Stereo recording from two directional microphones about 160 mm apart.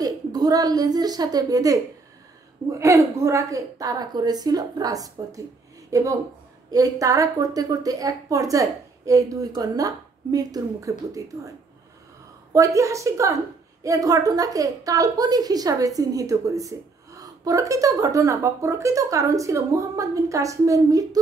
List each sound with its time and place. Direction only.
0.0 s a woman's voice: 25° right (ahead or behind)
12.5 s a woman's voice: 20° right (ahead or behind)